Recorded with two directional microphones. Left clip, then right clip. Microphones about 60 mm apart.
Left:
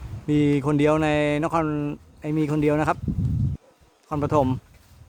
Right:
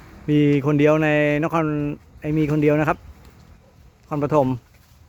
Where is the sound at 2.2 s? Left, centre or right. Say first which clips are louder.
Right 3 dB; right.